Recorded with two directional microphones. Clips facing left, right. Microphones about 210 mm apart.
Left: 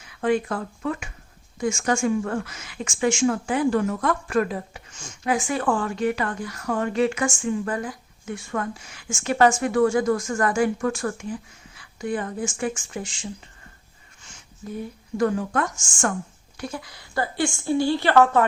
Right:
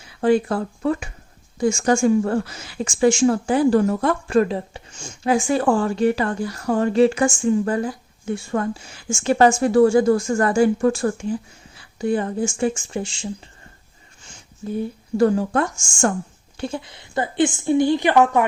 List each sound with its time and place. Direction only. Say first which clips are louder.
0.0 s a woman's voice: right 5 dB; 30° right (ahead or behind)
15.2 s a woman's voice: right 5 dB; 30° right (ahead or behind); by 18.4 s 15° right (ahead or behind)